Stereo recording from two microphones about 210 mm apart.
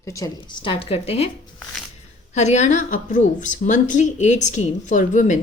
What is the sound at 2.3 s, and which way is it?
A woman's voice, 35° left (ahead or behind).